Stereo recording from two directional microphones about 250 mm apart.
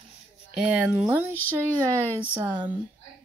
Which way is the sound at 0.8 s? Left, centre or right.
Centre.